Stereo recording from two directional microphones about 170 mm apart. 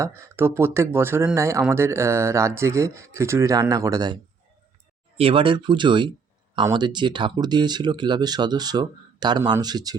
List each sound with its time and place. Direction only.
0.0 s speech: 15° right (ahead or behind)
5.1 s speech: 35° right (ahead or behind)